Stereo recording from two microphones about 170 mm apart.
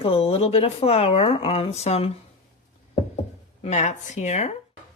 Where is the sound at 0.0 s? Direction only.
35° left (ahead or behind).